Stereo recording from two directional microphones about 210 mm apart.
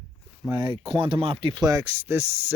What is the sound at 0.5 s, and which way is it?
Speech, 20° right (ahead or behind).